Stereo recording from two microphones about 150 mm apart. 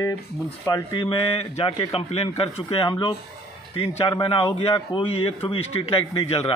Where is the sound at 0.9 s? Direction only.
35° left (ahead or behind).